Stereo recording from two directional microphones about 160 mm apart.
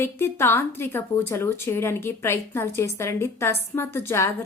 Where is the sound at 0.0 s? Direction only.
15° left (ahead or behind).